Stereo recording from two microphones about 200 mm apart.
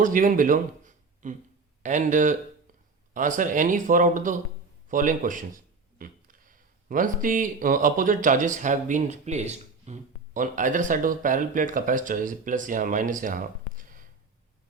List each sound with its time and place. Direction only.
0.0 s speech: 40° right (ahead or behind)